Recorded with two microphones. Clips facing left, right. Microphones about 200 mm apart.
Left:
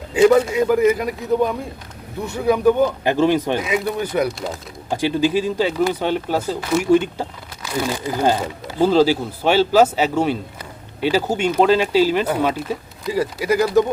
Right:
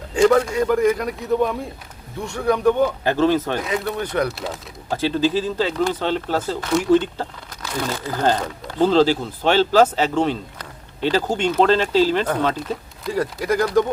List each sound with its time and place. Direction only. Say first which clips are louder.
0.1 s a man's voice: left 2 dB; 5° left (ahead or behind)
3.0 s speech: left 1 dB; 15° left (ahead or behind)
3.6 s a man's voice: left 2 dB; 5° left (ahead or behind)
4.9 s speech: left 1 dB; 15° left (ahead or behind)